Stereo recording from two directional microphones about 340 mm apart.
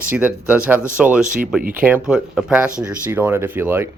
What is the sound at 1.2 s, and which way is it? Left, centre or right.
Speech, right.